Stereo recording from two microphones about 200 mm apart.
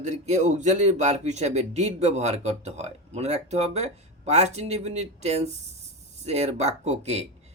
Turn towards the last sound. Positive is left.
turn(degrees=-30)  # may be behind; listen again after turning